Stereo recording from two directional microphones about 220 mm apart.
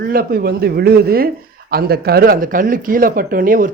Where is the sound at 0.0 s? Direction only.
40° right (ahead or behind).